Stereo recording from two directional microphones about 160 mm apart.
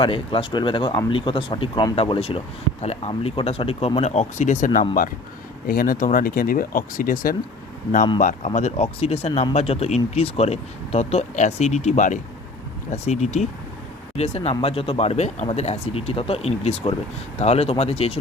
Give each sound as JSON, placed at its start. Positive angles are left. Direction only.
{"t": 0.0, "sound": "speech", "side_deg": 35}
{"t": 5.6, "sound": "speech", "side_deg": 65}
{"t": 8.2, "sound": "speech", "side_deg": 50}